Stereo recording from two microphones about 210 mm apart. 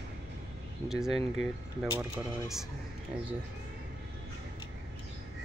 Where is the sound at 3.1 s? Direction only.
5° right (ahead or behind).